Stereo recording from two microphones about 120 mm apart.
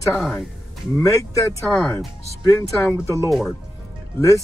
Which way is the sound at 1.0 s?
25° left (ahead or behind).